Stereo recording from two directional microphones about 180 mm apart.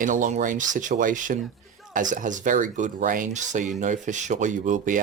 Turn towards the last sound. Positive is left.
turn(degrees=-45)  # may be behind; listen again after turning